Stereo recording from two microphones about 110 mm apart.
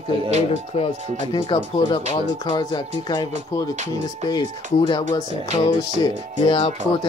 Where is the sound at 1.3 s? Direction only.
45° left (ahead or behind).